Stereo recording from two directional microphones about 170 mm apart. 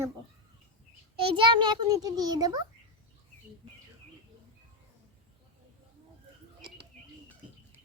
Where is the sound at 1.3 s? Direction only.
30° right (ahead or behind).